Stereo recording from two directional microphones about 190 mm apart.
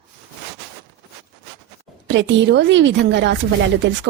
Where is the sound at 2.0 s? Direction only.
70° right (ahead or behind).